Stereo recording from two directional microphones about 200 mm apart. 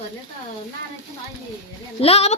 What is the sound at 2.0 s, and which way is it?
Speech, 30° left (ahead or behind).